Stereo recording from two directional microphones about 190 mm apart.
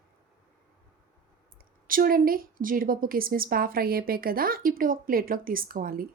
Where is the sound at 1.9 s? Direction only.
50° right (ahead or behind).